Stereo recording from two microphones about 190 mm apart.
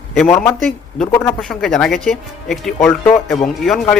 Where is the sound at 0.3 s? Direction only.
15° left (ahead or behind).